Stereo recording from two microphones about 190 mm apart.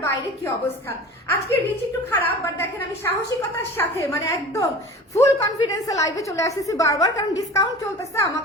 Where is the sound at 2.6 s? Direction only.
15° left (ahead or behind).